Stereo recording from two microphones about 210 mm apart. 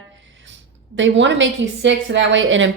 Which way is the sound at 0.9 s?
60° right (ahead or behind).